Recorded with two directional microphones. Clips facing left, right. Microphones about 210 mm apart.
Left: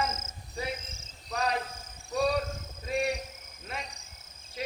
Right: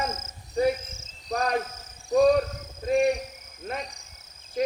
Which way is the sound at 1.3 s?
40° right (ahead or behind).